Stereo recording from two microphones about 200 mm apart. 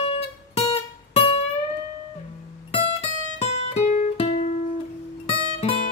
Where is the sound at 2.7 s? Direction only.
30° left (ahead or behind).